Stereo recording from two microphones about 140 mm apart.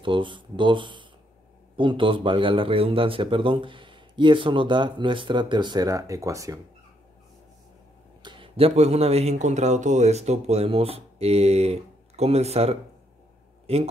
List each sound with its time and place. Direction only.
0.0 s a man's voice: 35° right (ahead or behind)
8.2 s speech: 35° right (ahead or behind)